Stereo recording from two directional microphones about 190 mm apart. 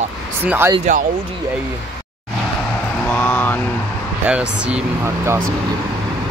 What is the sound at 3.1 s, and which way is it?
Speech, 10° left (ahead or behind).